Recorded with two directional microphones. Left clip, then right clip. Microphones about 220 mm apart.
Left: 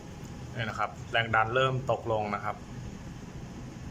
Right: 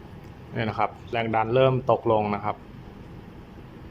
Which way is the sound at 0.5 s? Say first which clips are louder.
Right 6 dB; 20° right (ahead or behind).